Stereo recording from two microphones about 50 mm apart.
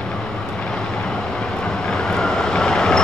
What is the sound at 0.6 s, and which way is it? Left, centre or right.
Vehicle, centre.